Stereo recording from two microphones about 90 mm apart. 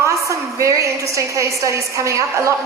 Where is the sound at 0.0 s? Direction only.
35° right (ahead or behind).